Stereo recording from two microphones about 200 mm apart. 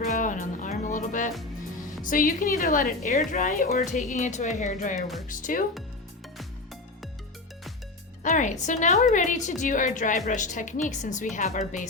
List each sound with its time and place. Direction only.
0.0 s music: 40° left (ahead or behind)
2.0 s a woman's voice: 45° left (ahead or behind)
8.2 s a woman's voice: 40° left (ahead or behind)